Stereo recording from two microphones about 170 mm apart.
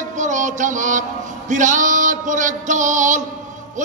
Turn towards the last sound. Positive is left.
turn(degrees=-45)  # may be behind; listen again after turning